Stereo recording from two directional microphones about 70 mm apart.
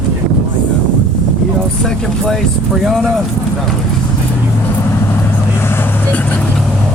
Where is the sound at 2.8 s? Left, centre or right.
Centre.